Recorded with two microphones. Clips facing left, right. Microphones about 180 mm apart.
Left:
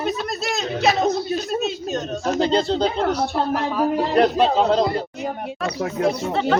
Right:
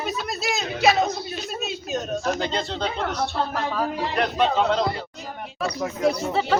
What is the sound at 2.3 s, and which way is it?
Speech, 35° left (ahead or behind).